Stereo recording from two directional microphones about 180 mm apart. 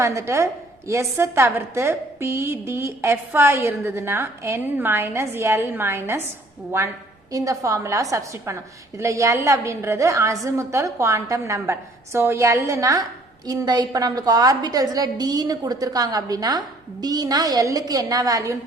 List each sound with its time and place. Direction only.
0.0 s a woman's voice: 15° right (ahead or behind)